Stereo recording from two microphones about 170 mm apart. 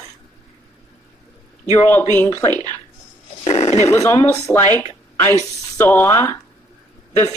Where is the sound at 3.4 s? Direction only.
40° left (ahead or behind).